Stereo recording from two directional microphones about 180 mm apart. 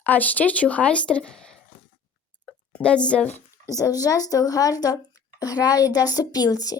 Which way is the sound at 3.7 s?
20° left (ahead or behind).